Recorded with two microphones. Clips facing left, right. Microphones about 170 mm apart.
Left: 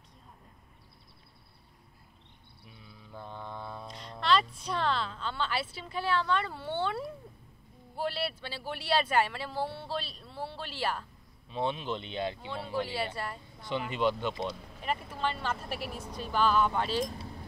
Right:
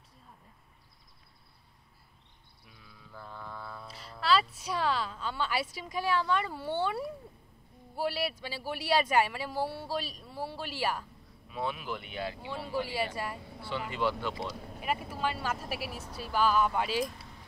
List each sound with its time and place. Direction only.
2.6 s mantra: 25° left (ahead or behind)
3.8 s a woman's voice: 5° right (ahead or behind)
11.4 s speech: 25° left (ahead or behind)
12.4 s a man's voice: 10° right (ahead or behind)
13.6 s speech: 20° left (ahead or behind)
14.5 s a man's voice: 10° right (ahead or behind)
17.1 s a sound: 35° left (ahead or behind)